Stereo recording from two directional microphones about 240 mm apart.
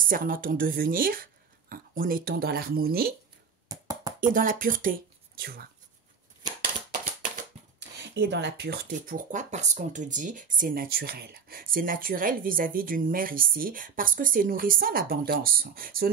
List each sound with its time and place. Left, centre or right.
0.0 s speech: right
3.6 s beatboxing: centre
4.2 s speech: right
8.1 s speech: right